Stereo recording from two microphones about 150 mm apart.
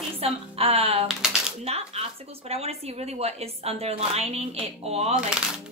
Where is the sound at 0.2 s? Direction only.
40° right (ahead or behind).